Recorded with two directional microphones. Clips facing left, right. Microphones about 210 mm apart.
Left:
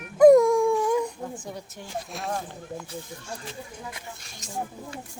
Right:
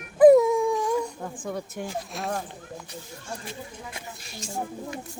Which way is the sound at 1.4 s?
55° right (ahead or behind).